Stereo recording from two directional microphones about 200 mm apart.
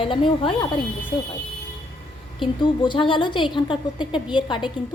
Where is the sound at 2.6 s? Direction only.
25° left (ahead or behind).